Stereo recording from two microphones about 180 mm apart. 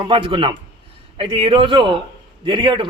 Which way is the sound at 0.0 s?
30° right (ahead or behind).